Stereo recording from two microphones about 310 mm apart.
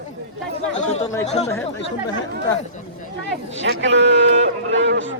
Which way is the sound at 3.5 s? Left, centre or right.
Right.